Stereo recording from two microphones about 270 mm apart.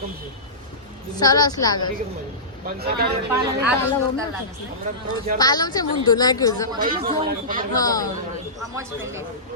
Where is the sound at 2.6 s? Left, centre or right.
Right.